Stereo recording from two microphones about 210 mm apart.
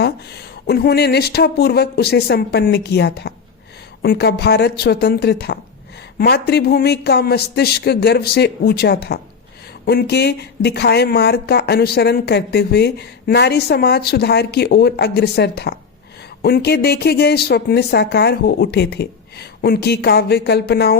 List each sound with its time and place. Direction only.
0.7 s speech: 50° left (ahead or behind)